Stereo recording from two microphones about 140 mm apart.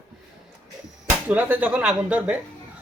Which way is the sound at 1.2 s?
10° right (ahead or behind).